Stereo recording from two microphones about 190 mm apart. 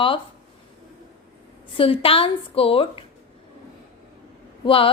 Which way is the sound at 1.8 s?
30° left (ahead or behind).